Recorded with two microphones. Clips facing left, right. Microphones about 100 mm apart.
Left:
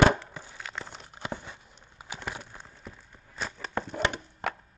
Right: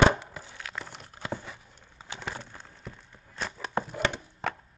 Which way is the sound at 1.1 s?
15° left (ahead or behind).